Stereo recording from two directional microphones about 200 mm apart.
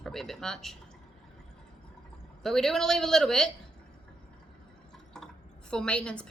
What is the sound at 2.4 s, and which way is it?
Speech, centre (ahead or behind).